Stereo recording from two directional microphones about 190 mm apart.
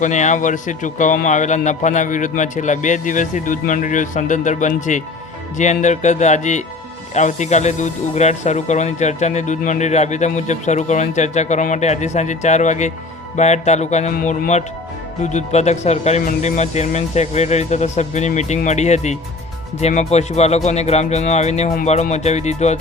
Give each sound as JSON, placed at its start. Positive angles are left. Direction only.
{"t": 0.0, "sound": "speech", "side_deg": 40}